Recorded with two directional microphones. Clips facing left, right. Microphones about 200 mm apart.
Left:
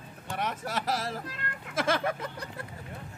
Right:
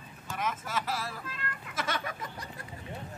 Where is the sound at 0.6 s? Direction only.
40° left (ahead or behind).